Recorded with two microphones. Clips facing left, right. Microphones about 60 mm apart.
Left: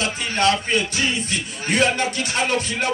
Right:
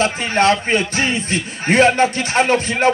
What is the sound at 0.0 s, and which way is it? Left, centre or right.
Speech, right.